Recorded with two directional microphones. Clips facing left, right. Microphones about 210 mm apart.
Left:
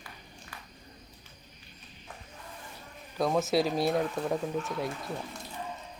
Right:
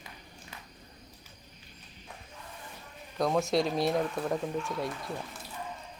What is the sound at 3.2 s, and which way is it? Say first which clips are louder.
Speech: left 1 dB; centre (ahead or behind).